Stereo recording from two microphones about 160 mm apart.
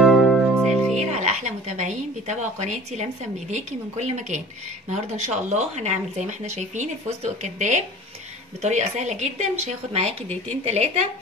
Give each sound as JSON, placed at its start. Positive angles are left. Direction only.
{"t": 0.0, "sound": "music", "side_deg": 5}
{"t": 0.9, "sound": "a woman's voice", "side_deg": -45}